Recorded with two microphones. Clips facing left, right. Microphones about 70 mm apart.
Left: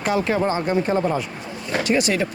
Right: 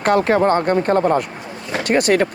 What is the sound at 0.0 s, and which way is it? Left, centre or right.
Speech, right.